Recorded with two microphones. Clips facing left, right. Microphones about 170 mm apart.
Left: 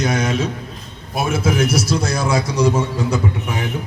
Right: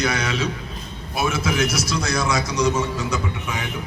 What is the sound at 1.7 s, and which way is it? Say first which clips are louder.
A man's voice: left 4 dB; 30° left (ahead or behind).